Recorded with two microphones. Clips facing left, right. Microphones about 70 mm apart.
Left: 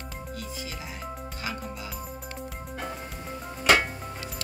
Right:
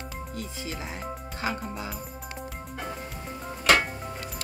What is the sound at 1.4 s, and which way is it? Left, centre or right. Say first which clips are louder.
Speech: right 5 dB; right.